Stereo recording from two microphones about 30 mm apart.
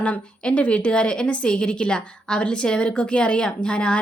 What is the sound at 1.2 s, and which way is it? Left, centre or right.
Speech, left.